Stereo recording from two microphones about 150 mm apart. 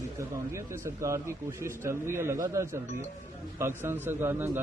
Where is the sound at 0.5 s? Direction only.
20° right (ahead or behind).